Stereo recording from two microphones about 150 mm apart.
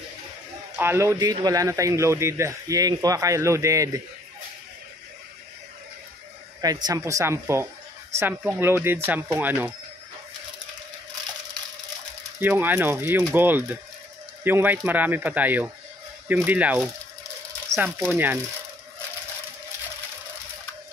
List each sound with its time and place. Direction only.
0.7 s a man's voice: 15° right (ahead or behind)
6.6 s a man's voice: 25° right (ahead or behind)
12.4 s speech: 15° right (ahead or behind)